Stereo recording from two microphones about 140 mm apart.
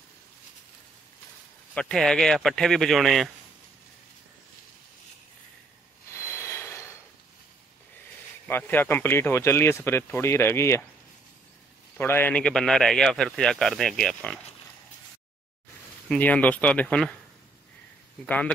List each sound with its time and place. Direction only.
1.8 s a man's voice: 5° left (ahead or behind)
6.1 s a sound: 20° left (ahead or behind)
8.5 s speech: 15° left (ahead or behind)
12.0 s a man's voice: 15° left (ahead or behind)
16.1 s speech: 10° left (ahead or behind)
18.2 s speech: 10° left (ahead or behind)